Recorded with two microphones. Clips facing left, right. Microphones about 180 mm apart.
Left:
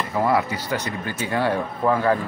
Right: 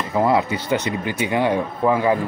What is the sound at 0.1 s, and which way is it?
Speech, 20° right (ahead or behind).